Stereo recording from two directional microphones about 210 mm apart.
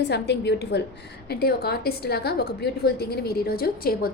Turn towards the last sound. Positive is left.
turn(degrees=45)  # may be behind; listen again after turning